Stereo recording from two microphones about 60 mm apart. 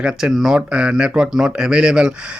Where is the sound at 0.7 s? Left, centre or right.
Centre.